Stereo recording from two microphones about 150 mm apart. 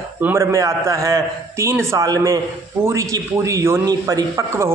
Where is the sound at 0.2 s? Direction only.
15° right (ahead or behind).